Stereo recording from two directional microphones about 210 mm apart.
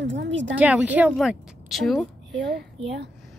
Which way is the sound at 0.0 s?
60° right (ahead or behind).